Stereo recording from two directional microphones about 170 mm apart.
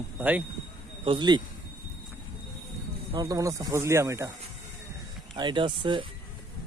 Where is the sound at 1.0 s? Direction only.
30° right (ahead or behind).